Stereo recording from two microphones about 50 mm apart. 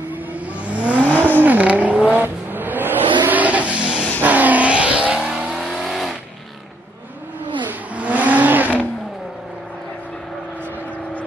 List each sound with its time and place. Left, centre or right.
0.3 s vehicle: right
2.2 s vehicle: right
5.5 s vehicle: centre
7.9 s vehicle: right